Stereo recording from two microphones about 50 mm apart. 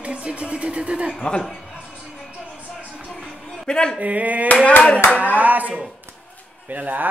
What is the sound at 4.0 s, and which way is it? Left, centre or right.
Speech, right.